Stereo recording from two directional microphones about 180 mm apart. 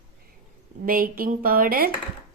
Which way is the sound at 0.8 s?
55° right (ahead or behind).